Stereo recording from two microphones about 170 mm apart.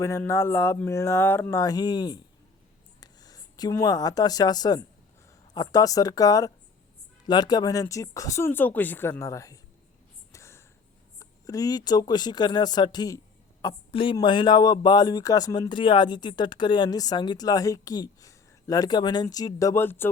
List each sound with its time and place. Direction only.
0.0 s speech: 15° left (ahead or behind)
10.3 s a sound: 15° left (ahead or behind)
11.2 s speech: 20° left (ahead or behind)